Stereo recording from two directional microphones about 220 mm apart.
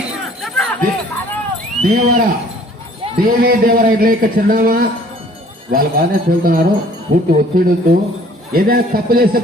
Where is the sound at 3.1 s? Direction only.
40° right (ahead or behind).